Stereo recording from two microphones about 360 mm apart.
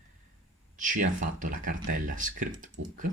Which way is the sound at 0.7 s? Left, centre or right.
Right.